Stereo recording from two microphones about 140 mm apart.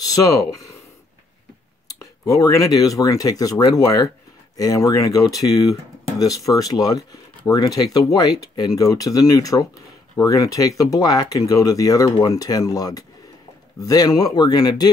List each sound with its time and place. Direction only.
0.0 s speech: 25° left (ahead or behind)
1.9 s speech: 25° left (ahead or behind)